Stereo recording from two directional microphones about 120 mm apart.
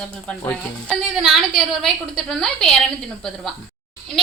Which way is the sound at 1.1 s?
Centre (ahead or behind).